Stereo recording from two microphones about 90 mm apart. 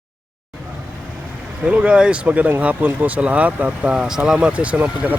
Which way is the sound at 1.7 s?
10° right (ahead or behind).